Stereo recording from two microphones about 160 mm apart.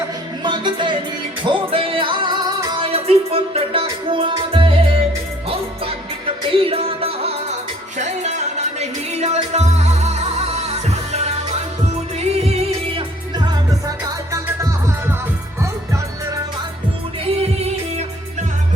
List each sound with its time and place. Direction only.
0.4 s music: 30° right (ahead or behind)
6.6 s music: 35° right (ahead or behind); by 15.1 s 15° right (ahead or behind)